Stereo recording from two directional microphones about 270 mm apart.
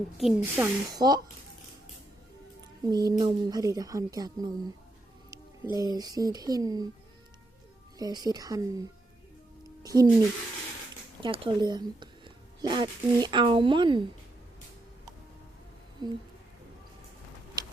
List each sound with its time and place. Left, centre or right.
0.2 s a woman's voice: centre
2.8 s a woman's voice: centre
7.9 s a woman's voice: centre
11.2 s a woman's voice: centre
16.0 s a woman's voice: centre